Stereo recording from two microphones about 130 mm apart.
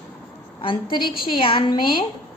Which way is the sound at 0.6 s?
40° left (ahead or behind).